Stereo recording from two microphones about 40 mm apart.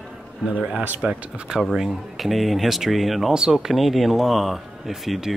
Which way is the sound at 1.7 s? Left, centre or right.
Centre.